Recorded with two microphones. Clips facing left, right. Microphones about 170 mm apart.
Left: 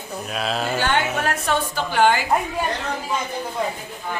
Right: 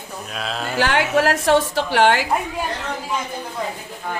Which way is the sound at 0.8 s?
90° right.